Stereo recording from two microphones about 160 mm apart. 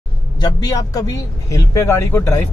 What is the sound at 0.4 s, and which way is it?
Speech, 25° left (ahead or behind).